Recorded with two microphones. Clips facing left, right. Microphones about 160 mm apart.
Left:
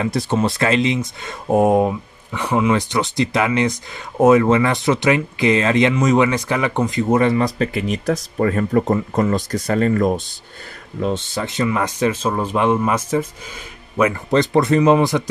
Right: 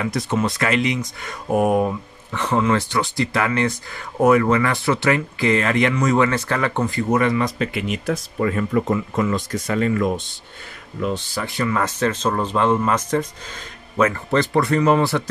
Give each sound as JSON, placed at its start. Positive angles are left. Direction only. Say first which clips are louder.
{"t": 0.0, "sound": "speech", "louder": "left 3 dB", "side_deg": 30}
{"t": 2.3, "sound": "speech", "louder": "left 2 dB", "side_deg": 10}
{"t": 11.2, "sound": "speech", "louder": "left 3 dB", "side_deg": 20}